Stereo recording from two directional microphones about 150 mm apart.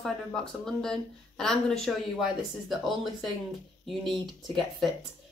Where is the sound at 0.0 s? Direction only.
5° left (ahead or behind).